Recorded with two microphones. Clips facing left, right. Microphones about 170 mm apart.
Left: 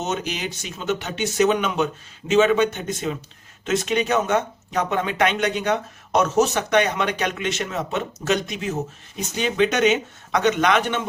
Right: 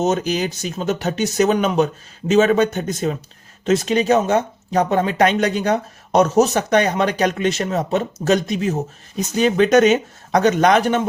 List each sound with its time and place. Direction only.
0.0 s speech: 40° right (ahead or behind)